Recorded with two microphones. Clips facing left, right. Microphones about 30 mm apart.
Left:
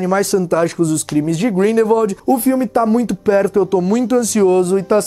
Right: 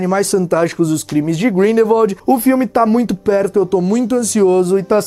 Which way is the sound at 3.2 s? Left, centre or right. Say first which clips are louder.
Left 2 dB; centre.